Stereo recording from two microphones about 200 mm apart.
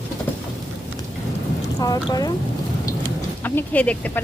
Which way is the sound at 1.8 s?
20° left (ahead or behind).